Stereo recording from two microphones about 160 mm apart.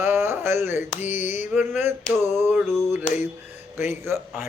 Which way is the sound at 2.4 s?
15° right (ahead or behind).